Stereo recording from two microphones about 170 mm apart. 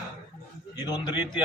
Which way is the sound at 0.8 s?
25° left (ahead or behind).